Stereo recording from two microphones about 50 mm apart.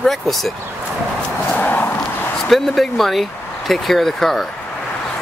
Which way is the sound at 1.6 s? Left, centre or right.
Left.